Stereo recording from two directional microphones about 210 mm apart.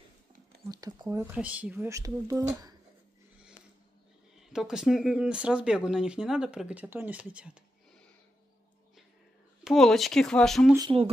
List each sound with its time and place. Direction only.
0.7 s speech: 15° right (ahead or behind)
4.5 s speech: 5° right (ahead or behind)
9.7 s speech: centre (ahead or behind)
10.8 s speech: 25° right (ahead or behind)